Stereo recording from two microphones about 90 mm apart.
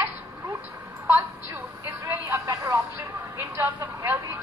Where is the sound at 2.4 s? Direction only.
40° right (ahead or behind).